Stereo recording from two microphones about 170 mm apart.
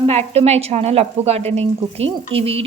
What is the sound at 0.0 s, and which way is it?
A woman's voice, 35° right (ahead or behind).